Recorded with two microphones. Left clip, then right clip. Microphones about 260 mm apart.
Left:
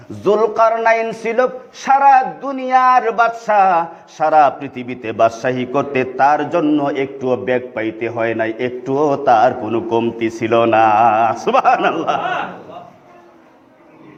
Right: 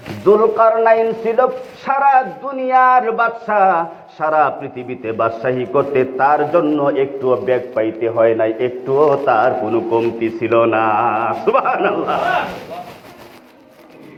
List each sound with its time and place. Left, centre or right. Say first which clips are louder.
0.3 s a man's voice: right 2 dB; left